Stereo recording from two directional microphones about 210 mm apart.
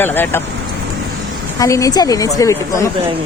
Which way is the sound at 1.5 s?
15° left (ahead or behind).